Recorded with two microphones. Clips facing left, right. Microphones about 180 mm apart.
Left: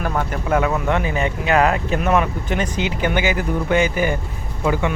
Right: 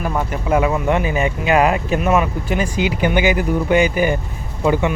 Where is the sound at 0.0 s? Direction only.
10° right (ahead or behind).